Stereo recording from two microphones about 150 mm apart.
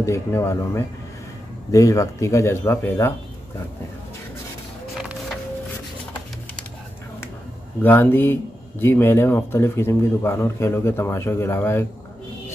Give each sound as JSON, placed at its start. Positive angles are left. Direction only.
{"t": 0.0, "sound": "speech", "side_deg": 20}
{"t": 4.9, "sound": "music", "side_deg": 0}
{"t": 7.8, "sound": "speech", "side_deg": 15}